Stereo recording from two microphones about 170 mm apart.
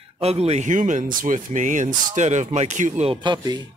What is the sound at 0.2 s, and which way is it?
Speech, 35° right (ahead or behind).